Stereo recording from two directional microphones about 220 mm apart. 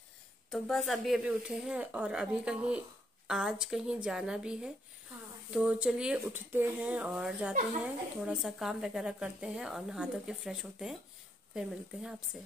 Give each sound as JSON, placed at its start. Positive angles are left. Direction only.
{"t": 0.5, "sound": "speech", "side_deg": 0}